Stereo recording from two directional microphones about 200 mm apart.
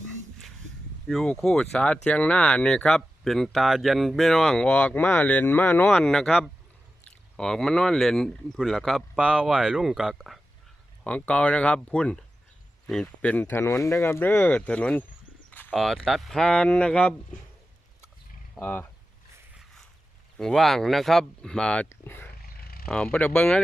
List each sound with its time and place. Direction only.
1.0 s speech: 5° left (ahead or behind)
18.6 s speech: 10° left (ahead or behind)
20.3 s speech: 5° left (ahead or behind)
22.4 s a sound: 50° left (ahead or behind)
22.9 s speech: 5° left (ahead or behind)